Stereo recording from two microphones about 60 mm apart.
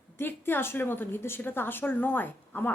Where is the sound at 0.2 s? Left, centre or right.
Left.